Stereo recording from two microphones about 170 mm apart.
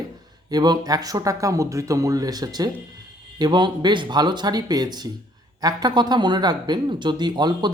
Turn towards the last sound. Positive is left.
turn(degrees=-25)  # may be behind; listen again after turning